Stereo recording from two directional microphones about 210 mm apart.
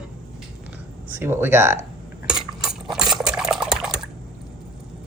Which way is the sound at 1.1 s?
10° right (ahead or behind).